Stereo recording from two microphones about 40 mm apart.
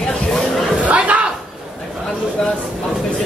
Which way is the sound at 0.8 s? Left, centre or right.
Right.